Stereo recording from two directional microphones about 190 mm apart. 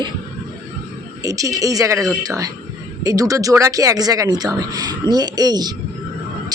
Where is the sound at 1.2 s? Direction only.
15° right (ahead or behind).